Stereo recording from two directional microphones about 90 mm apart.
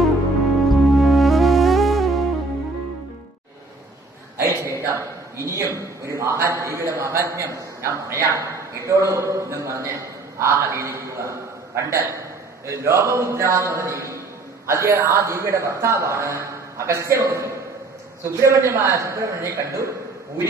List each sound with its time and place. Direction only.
0.7 s music: centre (ahead or behind)
4.4 s a sound: 30° right (ahead or behind)
14.7 s a man's voice: 30° right (ahead or behind)